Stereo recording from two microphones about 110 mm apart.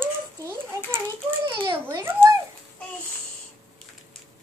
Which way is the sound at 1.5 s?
50° right (ahead or behind).